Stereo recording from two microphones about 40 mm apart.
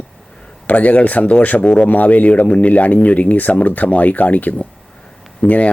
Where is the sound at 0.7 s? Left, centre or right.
Left.